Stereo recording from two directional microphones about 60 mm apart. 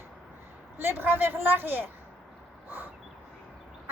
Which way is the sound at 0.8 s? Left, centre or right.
Right.